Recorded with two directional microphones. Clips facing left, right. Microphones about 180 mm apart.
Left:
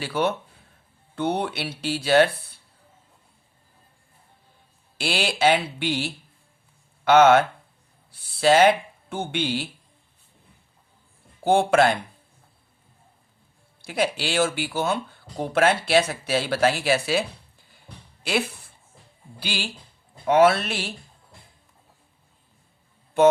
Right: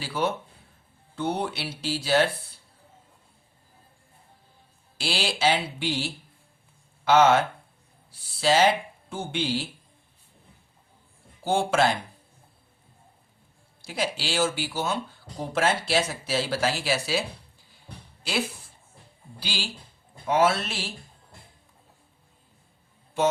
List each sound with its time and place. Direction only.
0.0 s speech: 60° left (ahead or behind)
4.9 s speech: 60° left (ahead or behind)
11.4 s speech: 60° left (ahead or behind)
13.8 s speech: 60° left (ahead or behind)
18.2 s music: 60° left (ahead or behind)
19.4 s speech: 60° left (ahead or behind)